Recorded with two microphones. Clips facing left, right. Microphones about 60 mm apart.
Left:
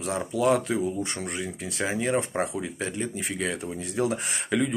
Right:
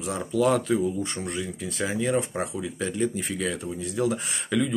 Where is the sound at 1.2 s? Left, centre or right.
Left.